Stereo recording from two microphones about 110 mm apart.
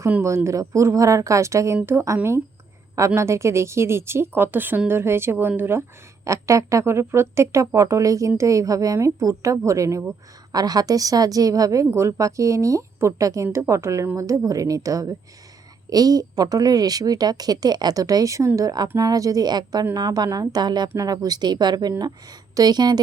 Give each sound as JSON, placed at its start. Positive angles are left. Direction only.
{"t": 0.2, "sound": "a woman's voice", "side_deg": -25}